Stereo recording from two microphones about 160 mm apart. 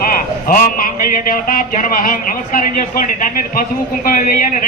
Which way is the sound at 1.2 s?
60° left (ahead or behind).